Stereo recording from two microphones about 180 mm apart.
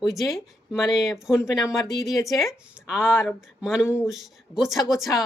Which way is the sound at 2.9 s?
5° right (ahead or behind).